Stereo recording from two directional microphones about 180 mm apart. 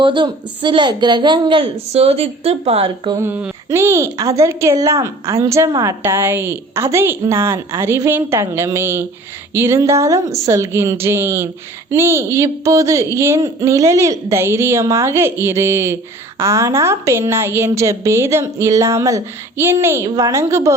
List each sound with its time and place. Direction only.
0.0 s a woman's voice: 25° right (ahead or behind)
3.2 s a woman's voice: 10° right (ahead or behind)